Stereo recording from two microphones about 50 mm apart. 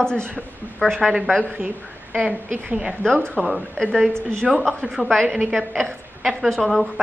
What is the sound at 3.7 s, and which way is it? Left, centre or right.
Speech, centre.